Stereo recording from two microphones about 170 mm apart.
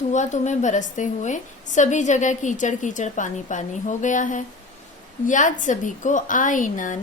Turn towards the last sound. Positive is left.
turn(degrees=50)  # may be behind; listen again after turning